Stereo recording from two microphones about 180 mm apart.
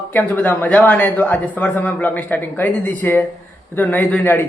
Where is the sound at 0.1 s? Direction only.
10° left (ahead or behind).